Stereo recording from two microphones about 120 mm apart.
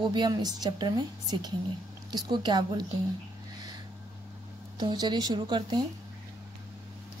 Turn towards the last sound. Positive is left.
turn(degrees=-40)  # may be behind; listen again after turning